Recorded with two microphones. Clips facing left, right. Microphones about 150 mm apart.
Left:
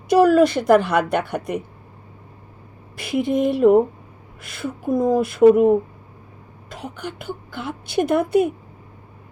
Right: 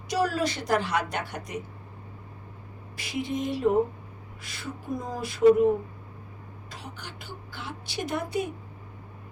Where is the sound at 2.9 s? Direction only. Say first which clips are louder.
Left 10 dB; 55° left (ahead or behind).